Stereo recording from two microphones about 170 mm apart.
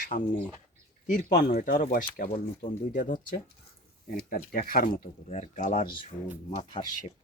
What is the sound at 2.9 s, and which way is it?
Speech, 55° left (ahead or behind).